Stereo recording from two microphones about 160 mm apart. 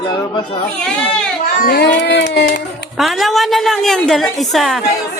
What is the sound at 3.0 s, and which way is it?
A woman's voice, centre (ahead or behind).